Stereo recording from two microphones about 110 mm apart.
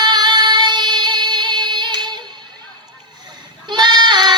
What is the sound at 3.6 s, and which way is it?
Goat, 40° right (ahead or behind).